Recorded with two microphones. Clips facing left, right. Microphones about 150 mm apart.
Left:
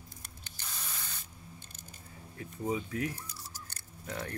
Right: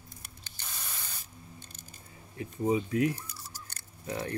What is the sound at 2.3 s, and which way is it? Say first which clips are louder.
Speech: right 6 dB; 20° right (ahead or behind).